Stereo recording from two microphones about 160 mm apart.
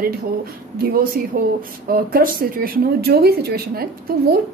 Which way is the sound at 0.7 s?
70° right (ahead or behind).